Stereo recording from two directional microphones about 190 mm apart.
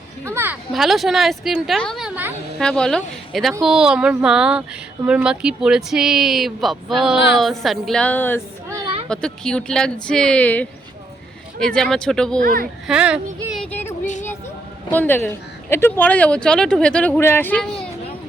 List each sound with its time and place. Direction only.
0.3 s speech: 10° right (ahead or behind)
0.7 s speech: centre (ahead or behind)
2.6 s speech: 5° left (ahead or behind)
12.4 s a child's voice: 50° right (ahead or behind)
12.9 s speech: 5° right (ahead or behind)
13.7 s a sound: 10° left (ahead or behind)
14.0 s music: 40° left (ahead or behind)
14.8 s speech: 10° left (ahead or behind)